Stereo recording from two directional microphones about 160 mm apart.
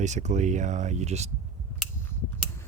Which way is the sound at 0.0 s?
50° right (ahead or behind).